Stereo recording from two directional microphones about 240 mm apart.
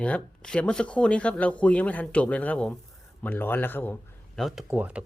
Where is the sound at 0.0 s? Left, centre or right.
Centre.